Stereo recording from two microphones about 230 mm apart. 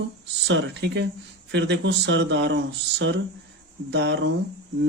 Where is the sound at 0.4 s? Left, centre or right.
Right.